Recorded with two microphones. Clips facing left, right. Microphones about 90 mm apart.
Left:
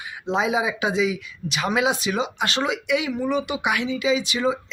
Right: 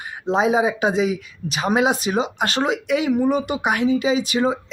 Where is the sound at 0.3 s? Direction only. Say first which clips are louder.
Right 4 dB; 40° right (ahead or behind).